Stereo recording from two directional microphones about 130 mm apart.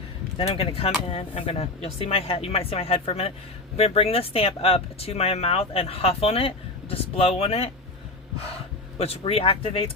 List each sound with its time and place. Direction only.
0.3 s speech: 50° left (ahead or behind)
9.0 s speech: 50° left (ahead or behind)